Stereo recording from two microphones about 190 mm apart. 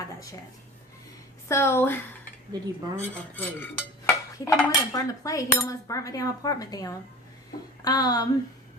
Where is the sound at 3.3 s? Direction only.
10° left (ahead or behind).